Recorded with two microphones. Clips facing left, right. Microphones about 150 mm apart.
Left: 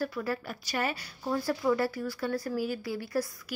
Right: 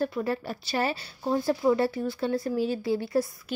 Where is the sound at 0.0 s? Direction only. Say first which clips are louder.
Right 4 dB; 25° right (ahead or behind).